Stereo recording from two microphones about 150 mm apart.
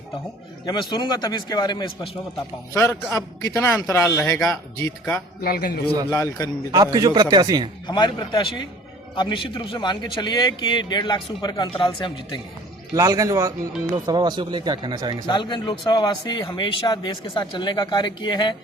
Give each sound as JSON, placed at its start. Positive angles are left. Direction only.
{"t": 0.6, "sound": "speech", "side_deg": 30}
{"t": 2.7, "sound": "speech", "side_deg": 20}
{"t": 5.4, "sound": "a man's voice", "side_deg": 90}
{"t": 6.1, "sound": "speech", "side_deg": 20}
{"t": 6.7, "sound": "speech", "side_deg": -25}
{"t": 7.9, "sound": "a man's voice", "side_deg": 30}
{"t": 12.9, "sound": "speech", "side_deg": -25}
{"t": 15.3, "sound": "a man's voice", "side_deg": 30}